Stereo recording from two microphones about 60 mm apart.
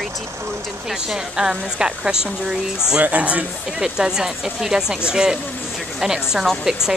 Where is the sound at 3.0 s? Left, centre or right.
Right.